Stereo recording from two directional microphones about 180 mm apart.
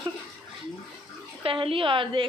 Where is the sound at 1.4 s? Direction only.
30° right (ahead or behind).